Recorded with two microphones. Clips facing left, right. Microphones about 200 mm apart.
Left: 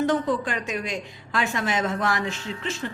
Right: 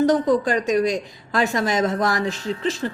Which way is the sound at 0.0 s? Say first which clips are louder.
Right 6 dB; 40° right (ahead or behind).